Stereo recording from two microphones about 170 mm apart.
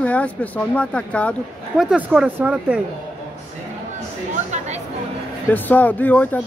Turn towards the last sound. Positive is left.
turn(degrees=10)  # may be behind; listen again after turning